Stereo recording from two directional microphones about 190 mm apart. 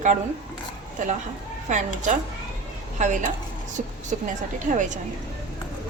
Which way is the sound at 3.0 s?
40° right (ahead or behind).